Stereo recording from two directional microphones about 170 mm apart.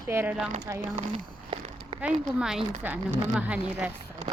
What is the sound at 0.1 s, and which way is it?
Speech, 10° right (ahead or behind).